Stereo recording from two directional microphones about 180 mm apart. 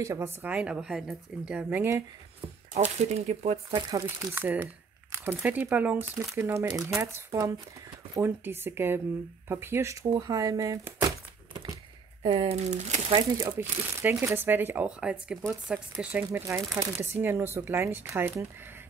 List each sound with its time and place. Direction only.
0.0 s speech: 15° right (ahead or behind)
2.7 s speech: 40° right (ahead or behind)
3.9 s speech: 15° right (ahead or behind)
12.2 s speech: 30° right (ahead or behind)
13.4 s speech: 10° right (ahead or behind)